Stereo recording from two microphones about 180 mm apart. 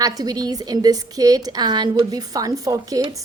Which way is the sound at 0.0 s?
20° right (ahead or behind).